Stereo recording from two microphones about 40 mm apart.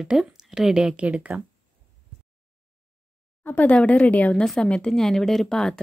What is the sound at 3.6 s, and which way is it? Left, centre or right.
Speech, left.